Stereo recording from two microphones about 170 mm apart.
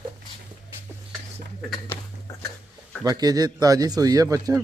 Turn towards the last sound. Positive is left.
turn(degrees=-20)  # may be behind; listen again after turning